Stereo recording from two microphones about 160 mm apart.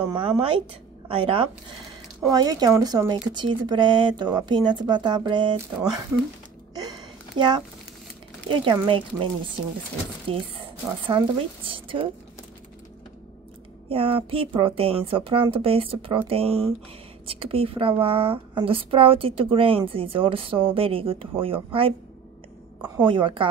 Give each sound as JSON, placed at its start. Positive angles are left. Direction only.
{"t": 0.2, "sound": "speech", "side_deg": -35}
{"t": 2.2, "sound": "speech", "side_deg": -25}
{"t": 6.7, "sound": "a sound", "side_deg": -25}
{"t": 8.8, "sound": "speech", "side_deg": -35}
{"t": 13.8, "sound": "speech", "side_deg": -35}
{"t": 22.9, "sound": "speech", "side_deg": -30}